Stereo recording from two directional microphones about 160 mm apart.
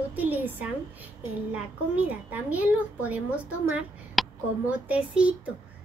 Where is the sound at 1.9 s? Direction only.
10° right (ahead or behind).